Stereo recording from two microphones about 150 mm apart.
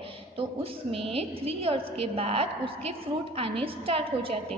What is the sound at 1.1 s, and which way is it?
A woman's voice, 40° right (ahead or behind).